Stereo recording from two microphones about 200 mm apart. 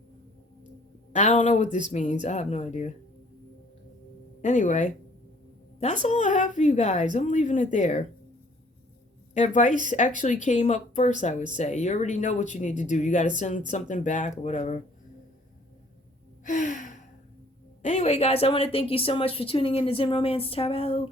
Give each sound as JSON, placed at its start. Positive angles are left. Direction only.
{"t": 1.1, "sound": "speech", "side_deg": 35}
{"t": 4.4, "sound": "speech", "side_deg": 40}
{"t": 9.3, "sound": "speech", "side_deg": 40}
{"t": 16.4, "sound": "gasp", "side_deg": 40}
{"t": 17.8, "sound": "a woman's voice", "side_deg": 35}